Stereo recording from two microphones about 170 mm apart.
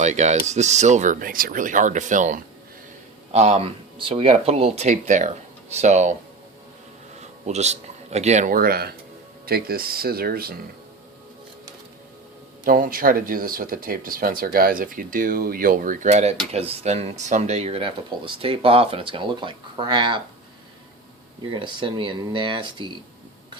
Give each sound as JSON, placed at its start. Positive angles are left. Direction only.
{"t": 0.0, "sound": "speech", "side_deg": -45}
{"t": 7.2, "sound": "speech", "side_deg": -40}
{"t": 12.6, "sound": "speech", "side_deg": -55}
{"t": 21.5, "sound": "speech", "side_deg": -30}